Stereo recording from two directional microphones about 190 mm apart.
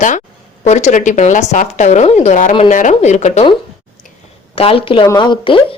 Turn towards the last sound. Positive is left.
turn(degrees=25)  # may be behind; listen again after turning